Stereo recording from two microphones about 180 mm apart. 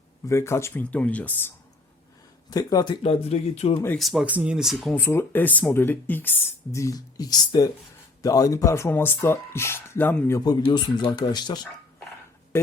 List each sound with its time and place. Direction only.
0.3 s speech: 15° left (ahead or behind)
2.5 s speech: 20° left (ahead or behind); by 3.8 s 35° left (ahead or behind)
3.8 s speech: 5° left (ahead or behind)
4.9 s speech: 15° left (ahead or behind)